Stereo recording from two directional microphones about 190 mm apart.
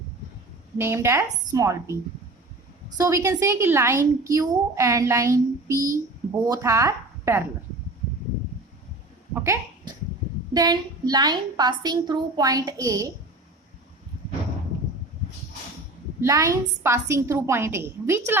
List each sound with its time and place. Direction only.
0.8 s a woman's voice: 15° right (ahead or behind)
3.0 s a woman's voice: 15° right (ahead or behind)
9.3 s a sound: 15° right (ahead or behind)
10.5 s a woman's voice: 20° right (ahead or behind)
16.2 s a woman's voice: 15° right (ahead or behind)